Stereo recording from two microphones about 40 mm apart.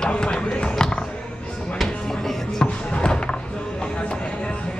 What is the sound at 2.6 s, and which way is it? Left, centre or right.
Music, left.